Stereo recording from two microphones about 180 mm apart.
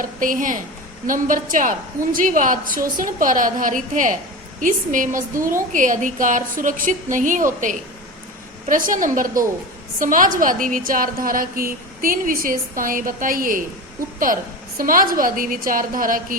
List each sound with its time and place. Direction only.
0.0 s a woman's voice: 50° right (ahead or behind)
14.8 s a woman's voice: 50° right (ahead or behind)